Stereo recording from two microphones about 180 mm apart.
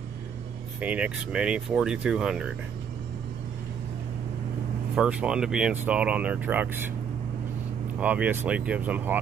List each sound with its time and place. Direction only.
0.7 s speech: 5° right (ahead or behind)
4.9 s speech: 5° right (ahead or behind)
8.0 s speech: 10° right (ahead or behind)